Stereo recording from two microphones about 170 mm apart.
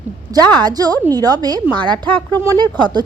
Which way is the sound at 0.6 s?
20° right (ahead or behind).